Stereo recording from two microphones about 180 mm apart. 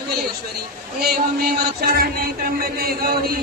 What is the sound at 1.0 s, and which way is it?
A man's voice, 60° right (ahead or behind).